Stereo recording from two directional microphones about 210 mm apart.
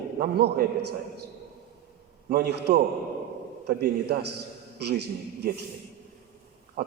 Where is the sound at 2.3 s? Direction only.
50° right (ahead or behind).